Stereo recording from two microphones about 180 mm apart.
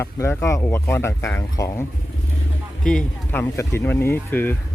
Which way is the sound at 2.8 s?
5° left (ahead or behind).